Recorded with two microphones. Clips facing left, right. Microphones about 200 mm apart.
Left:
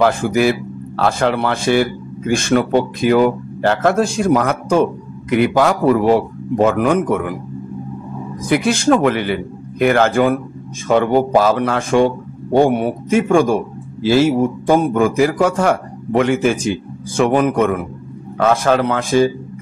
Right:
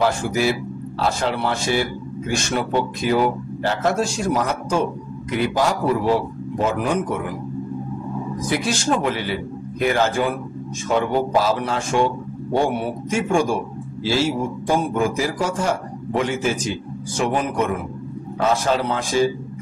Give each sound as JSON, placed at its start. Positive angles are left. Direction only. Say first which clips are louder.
{"t": 0.0, "sound": "speech", "louder": "left 5 dB", "side_deg": 55}
{"t": 8.5, "sound": "speech", "louder": "left 8 dB", "side_deg": 55}
{"t": 13.1, "sound": "speech", "louder": "left 6 dB", "side_deg": 55}